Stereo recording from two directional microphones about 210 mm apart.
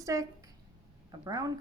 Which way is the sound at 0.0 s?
15° right (ahead or behind).